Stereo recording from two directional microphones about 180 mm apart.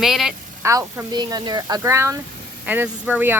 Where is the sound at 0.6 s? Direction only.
15° right (ahead or behind).